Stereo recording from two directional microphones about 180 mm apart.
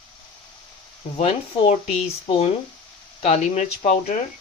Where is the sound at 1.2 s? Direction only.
35° left (ahead or behind).